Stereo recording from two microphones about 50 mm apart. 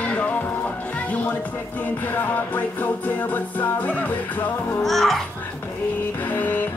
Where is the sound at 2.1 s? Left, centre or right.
Left.